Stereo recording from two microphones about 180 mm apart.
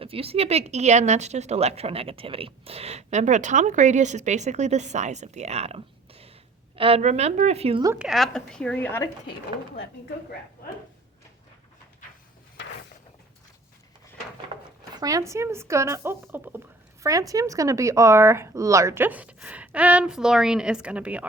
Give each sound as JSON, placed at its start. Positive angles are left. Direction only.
{"t": 0.0, "sound": "speech", "side_deg": -30}
{"t": 7.9, "sound": "a woman's voice", "side_deg": 0}
{"t": 14.5, "sound": "speech", "side_deg": -20}